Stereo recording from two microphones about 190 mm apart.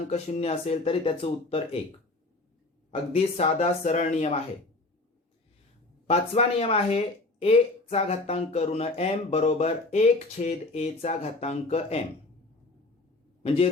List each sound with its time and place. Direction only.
0.1 s speech: 30° left (ahead or behind)
2.9 s speech: 30° left (ahead or behind)
6.1 s speech: 35° left (ahead or behind)
13.4 s a man's voice: 35° left (ahead or behind)